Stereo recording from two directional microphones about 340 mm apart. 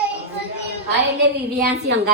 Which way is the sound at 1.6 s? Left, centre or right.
Right.